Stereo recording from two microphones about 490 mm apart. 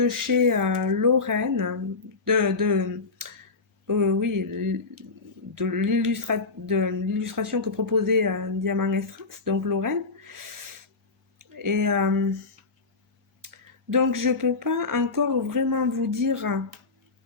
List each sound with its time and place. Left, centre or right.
0.0 s speech: right
11.3 s speech: right
13.9 s speech: right